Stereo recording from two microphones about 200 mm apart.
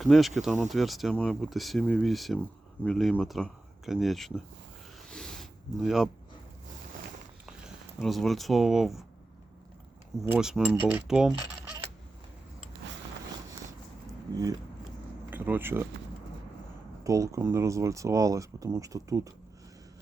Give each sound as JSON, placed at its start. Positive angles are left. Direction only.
{"t": 0.0, "sound": "speech", "side_deg": 0}
{"t": 5.0, "sound": "a sound", "side_deg": 5}
{"t": 8.0, "sound": "speech", "side_deg": 0}
{"t": 10.2, "sound": "speech", "side_deg": -5}
{"t": 15.3, "sound": "speech", "side_deg": -10}
{"t": 17.0, "sound": "speech", "side_deg": -15}